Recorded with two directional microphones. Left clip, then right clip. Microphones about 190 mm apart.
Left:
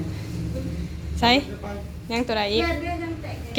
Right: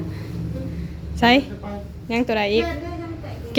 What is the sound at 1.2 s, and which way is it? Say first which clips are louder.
A woman's voice: right 3 dB; 30° right (ahead or behind).